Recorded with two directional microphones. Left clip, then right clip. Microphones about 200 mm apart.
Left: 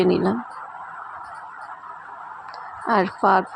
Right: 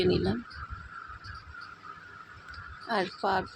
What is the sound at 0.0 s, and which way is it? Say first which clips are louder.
Speech: left 8 dB; 25° left (ahead or behind).